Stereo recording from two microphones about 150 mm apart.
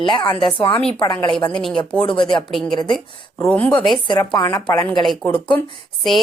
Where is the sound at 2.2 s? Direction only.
30° left (ahead or behind).